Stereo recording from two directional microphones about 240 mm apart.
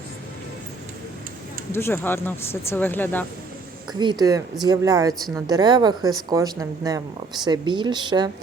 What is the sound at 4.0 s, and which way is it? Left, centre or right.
A woman's voice, centre.